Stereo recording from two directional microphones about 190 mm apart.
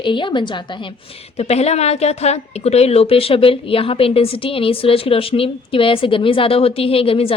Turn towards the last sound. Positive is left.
turn(degrees=30)  # may be behind; listen again after turning